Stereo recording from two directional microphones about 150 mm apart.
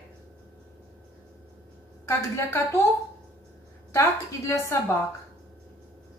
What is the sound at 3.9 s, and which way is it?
Speech, 15° left (ahead or behind).